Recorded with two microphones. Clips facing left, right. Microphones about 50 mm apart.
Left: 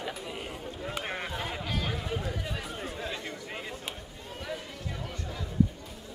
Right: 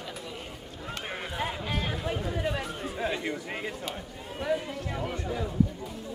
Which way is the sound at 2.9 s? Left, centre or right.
Centre.